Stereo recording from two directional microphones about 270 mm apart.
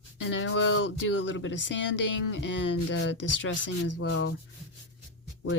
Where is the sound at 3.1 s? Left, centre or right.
Left.